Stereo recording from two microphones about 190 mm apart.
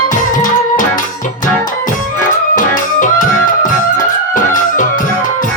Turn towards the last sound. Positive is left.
turn(degrees=45)  # may be behind; listen again after turning